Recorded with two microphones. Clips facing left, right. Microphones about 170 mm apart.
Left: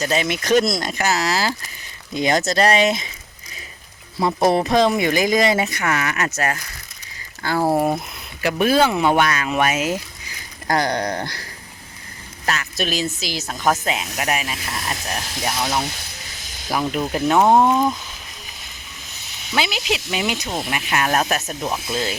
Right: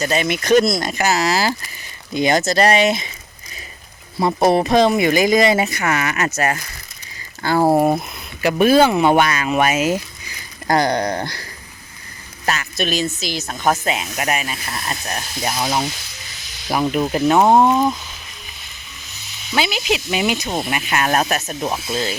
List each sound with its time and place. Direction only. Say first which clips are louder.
0.0 s speech: right 2 dB; centre (ahead or behind)
2.1 s speech: right 2 dB; centre (ahead or behind)
4.4 s speech: right 2 dB; 5° right (ahead or behind)
7.6 s speech: right 4 dB; 45° right (ahead or behind)
8.4 s speech: right 4 dB; 15° right (ahead or behind)
10.7 s speech: right 3 dB; 30° right (ahead or behind)
12.5 s speech: right 2 dB; 5° left (ahead or behind)
16.7 s speech: right 3 dB; 10° right (ahead or behind)
19.5 s speech: right 3 dB; centre (ahead or behind)